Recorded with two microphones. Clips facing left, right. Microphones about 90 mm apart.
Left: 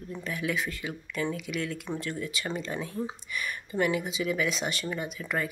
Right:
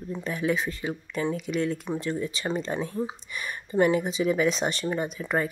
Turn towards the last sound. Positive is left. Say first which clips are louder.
# right 5 dB
turn(degrees=-30)  # may be behind; listen again after turning